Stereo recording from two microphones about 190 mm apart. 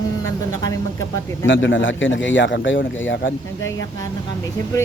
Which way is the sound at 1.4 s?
80° left.